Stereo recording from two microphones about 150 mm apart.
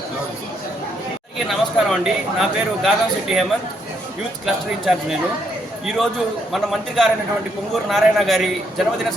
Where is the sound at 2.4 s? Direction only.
Centre (ahead or behind).